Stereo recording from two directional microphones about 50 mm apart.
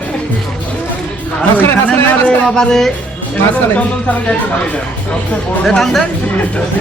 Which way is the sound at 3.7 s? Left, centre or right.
Left.